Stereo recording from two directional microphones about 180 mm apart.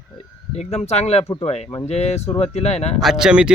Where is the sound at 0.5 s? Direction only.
35° left (ahead or behind).